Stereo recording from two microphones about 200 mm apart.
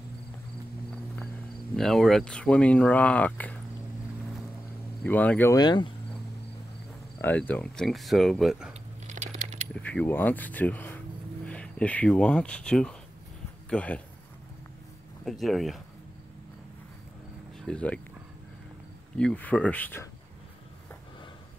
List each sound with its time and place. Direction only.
1.8 s speech: centre (ahead or behind)
5.0 s speech: 5° left (ahead or behind)
7.2 s speech: 10° left (ahead or behind)
9.0 s coin: 35° right (ahead or behind)
9.8 s speech: 5° left (ahead or behind)
15.2 s speech: centre (ahead or behind)
17.6 s speech: 5° left (ahead or behind)
19.1 s speech: 5° left (ahead or behind)